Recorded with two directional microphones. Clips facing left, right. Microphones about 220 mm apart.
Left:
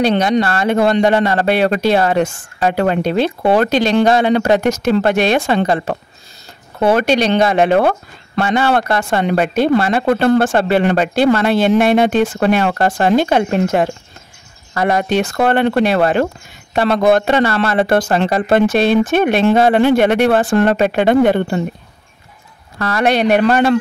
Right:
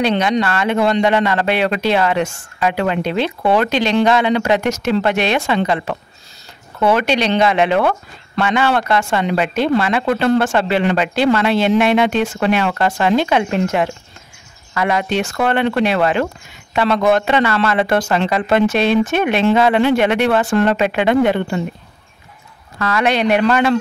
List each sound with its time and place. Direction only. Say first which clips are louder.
0.0 s a man's voice: left 2 dB; 40° left (ahead or behind)
7.0 s a man's voice: left 2 dB; 45° left (ahead or behind)
18.2 s a man's voice: left 2 dB; 45° left (ahead or behind)
22.8 s speech: left 1 dB; 35° left (ahead or behind)
23.2 s a man's voice: left 2 dB; 50° left (ahead or behind)